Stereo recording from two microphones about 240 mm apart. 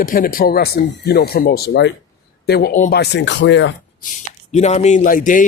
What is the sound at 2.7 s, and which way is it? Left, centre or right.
Speech, left.